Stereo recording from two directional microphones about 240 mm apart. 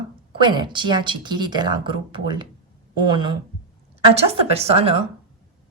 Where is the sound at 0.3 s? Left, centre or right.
Centre.